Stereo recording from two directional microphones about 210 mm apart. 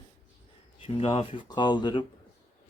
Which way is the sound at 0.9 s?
25° left (ahead or behind).